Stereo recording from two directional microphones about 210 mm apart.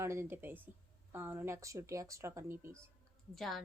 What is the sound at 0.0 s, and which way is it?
A woman's voice, 10° right (ahead or behind).